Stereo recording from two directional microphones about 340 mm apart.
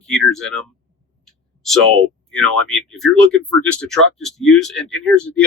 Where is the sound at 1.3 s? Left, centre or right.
Centre.